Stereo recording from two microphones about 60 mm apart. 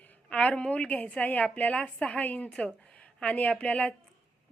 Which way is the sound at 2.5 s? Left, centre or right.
Centre.